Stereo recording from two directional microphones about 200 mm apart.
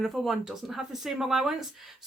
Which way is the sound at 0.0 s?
Centre (ahead or behind).